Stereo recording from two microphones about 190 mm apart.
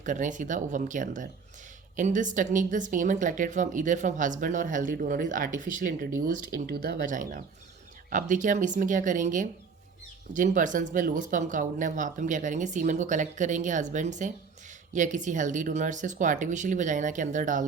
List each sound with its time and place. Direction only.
0.0 s speech: 40° right (ahead or behind)